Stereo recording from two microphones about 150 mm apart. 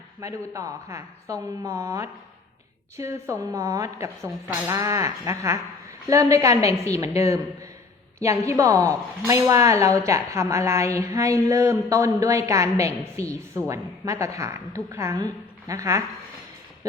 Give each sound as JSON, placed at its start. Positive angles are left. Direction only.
{"t": 0.2, "sound": "speech", "side_deg": -20}